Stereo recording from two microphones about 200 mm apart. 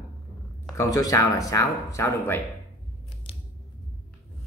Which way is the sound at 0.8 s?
15° left (ahead or behind).